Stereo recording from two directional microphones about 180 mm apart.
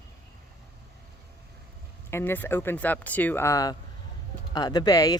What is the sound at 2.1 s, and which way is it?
Speech, 10° left (ahead or behind).